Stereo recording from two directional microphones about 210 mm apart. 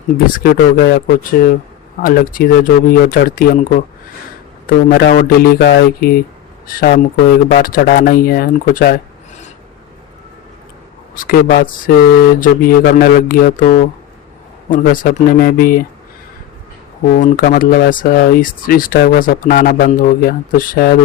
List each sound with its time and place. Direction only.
0.3 s speech: 45° left (ahead or behind)
11.1 s speech: 40° left (ahead or behind)
17.1 s speech: 40° left (ahead or behind)